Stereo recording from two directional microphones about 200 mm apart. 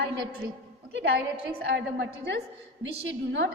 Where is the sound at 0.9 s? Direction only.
55° right (ahead or behind).